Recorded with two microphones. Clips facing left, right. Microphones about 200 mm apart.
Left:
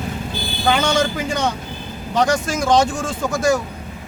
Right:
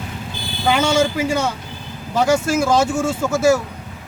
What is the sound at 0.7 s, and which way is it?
Speech, 10° right (ahead or behind).